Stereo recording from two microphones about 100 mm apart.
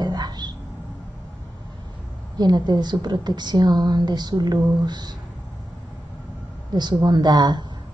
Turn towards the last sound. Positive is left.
turn(degrees=-45)  # may be behind; listen again after turning